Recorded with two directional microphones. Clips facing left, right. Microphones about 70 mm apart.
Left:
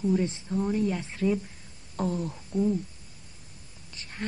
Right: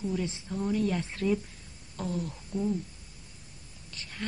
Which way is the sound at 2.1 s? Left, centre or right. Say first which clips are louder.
Left 2 dB; centre.